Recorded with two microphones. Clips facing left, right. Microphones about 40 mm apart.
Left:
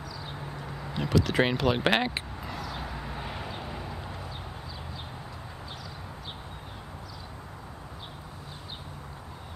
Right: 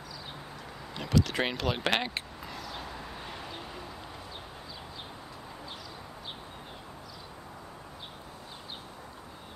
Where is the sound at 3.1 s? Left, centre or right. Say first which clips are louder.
Left 4 dB; left.